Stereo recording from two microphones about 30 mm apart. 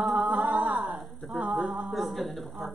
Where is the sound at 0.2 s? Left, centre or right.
Right.